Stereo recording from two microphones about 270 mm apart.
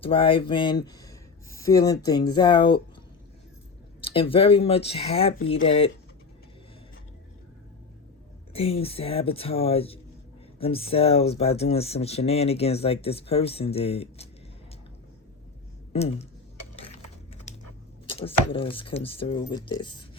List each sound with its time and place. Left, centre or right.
0.0 s speech: centre
4.0 s speech: centre
8.5 s speech: left
15.9 s speech: left
18.1 s a sound: centre
18.5 s speech: centre